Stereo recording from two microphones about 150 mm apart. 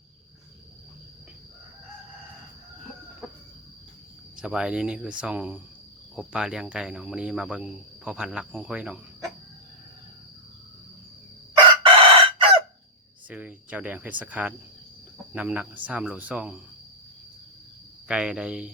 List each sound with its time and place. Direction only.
4.4 s speech: 5° right (ahead or behind)
11.9 s chicken: 35° right (ahead or behind)
13.2 s speech: 10° right (ahead or behind)
18.1 s speech: 5° right (ahead or behind)